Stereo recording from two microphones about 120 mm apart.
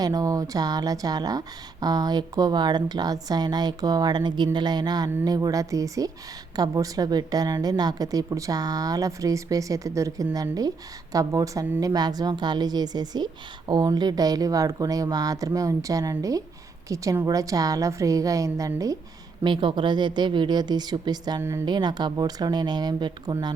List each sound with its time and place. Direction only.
0.0 s a woman's voice: 30° right (ahead or behind)
19.4 s a woman's voice: 40° right (ahead or behind)